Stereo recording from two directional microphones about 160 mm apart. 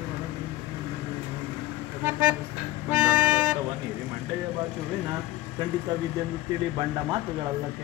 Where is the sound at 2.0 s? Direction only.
10° right (ahead or behind).